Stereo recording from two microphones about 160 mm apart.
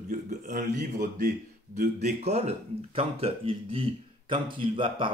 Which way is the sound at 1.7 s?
45° right (ahead or behind).